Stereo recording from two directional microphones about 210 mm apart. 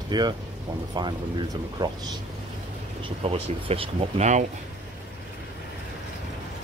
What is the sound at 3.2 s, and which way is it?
Speech, 30° right (ahead or behind).